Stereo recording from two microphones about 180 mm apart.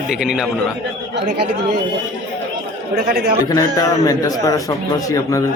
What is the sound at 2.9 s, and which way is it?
Speech, 55° right (ahead or behind).